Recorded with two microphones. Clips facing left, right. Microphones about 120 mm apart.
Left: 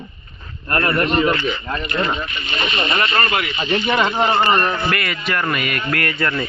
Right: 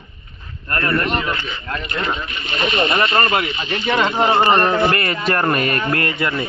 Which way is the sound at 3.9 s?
Centre (ahead or behind).